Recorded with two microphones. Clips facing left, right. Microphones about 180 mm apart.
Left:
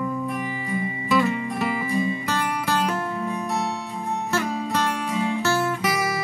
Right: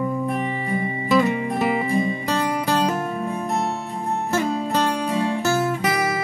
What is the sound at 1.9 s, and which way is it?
Music, 55° right (ahead or behind).